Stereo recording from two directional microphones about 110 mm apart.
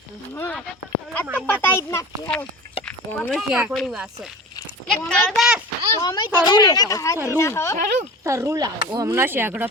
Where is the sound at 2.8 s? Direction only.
15° left (ahead or behind).